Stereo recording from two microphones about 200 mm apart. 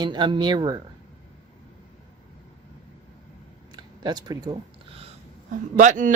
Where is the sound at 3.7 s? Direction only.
20° right (ahead or behind).